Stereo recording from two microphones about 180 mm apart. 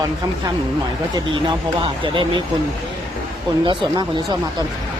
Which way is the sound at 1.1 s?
25° right (ahead or behind).